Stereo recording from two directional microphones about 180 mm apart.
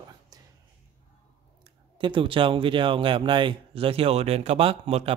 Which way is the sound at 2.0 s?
30° right (ahead or behind).